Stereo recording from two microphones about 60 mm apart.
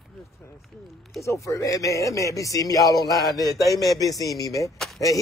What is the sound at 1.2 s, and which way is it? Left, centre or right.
Speech, left.